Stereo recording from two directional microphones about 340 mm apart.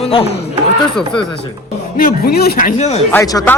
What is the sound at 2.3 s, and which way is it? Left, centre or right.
A man's voice, left.